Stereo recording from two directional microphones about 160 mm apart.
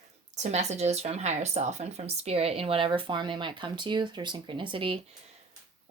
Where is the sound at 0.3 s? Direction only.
45° right (ahead or behind).